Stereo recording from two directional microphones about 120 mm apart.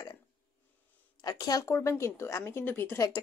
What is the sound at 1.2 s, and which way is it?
A woman's voice, 35° left (ahead or behind).